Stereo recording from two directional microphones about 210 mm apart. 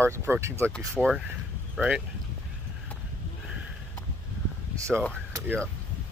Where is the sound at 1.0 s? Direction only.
Centre (ahead or behind).